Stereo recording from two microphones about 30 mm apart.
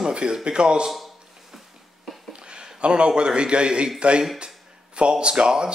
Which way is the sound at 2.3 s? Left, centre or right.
Right.